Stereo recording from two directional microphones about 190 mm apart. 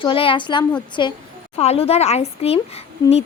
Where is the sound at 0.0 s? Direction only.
25° left (ahead or behind).